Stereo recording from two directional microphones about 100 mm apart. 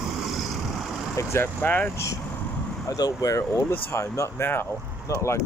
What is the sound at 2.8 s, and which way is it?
Speech, 40° left (ahead or behind).